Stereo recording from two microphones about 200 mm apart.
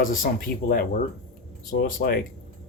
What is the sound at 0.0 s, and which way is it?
Speech, 45° left (ahead or behind).